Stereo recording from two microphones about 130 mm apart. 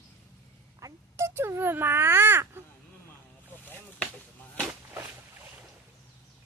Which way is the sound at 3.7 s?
15° left (ahead or behind).